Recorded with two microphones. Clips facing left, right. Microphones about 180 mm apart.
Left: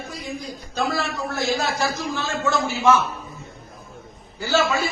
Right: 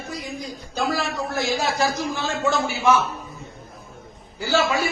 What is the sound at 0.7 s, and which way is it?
A man's voice, 15° right (ahead or behind).